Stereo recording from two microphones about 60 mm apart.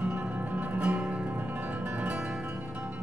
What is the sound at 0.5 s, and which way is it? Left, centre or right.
Music, right.